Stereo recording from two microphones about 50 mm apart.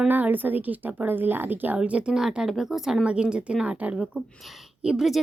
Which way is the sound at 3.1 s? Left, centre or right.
Centre.